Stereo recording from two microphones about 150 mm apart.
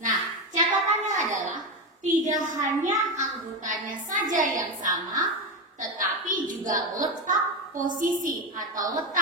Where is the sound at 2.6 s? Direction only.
55° right (ahead or behind).